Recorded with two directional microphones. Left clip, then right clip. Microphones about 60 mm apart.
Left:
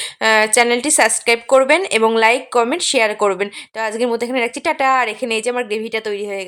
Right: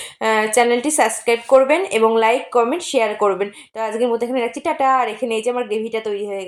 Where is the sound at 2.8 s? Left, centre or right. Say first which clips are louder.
Left 2 dB; centre.